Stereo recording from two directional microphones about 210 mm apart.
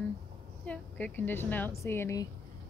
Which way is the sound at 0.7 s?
5° left (ahead or behind).